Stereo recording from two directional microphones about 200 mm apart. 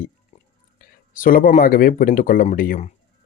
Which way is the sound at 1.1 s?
45° left (ahead or behind).